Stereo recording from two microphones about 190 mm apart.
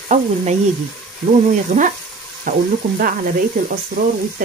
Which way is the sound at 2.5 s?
45° right (ahead or behind).